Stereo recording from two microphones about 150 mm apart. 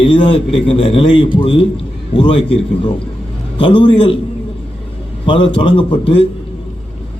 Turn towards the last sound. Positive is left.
turn(degrees=35)  # may be behind; listen again after turning